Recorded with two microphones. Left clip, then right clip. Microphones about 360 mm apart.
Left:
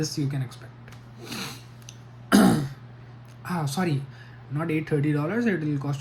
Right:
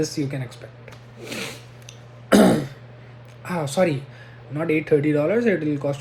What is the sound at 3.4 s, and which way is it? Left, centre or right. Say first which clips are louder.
A man's voice: right 8 dB; centre.